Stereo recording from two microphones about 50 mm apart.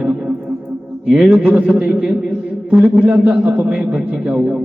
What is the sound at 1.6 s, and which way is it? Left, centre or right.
A man's voice, centre.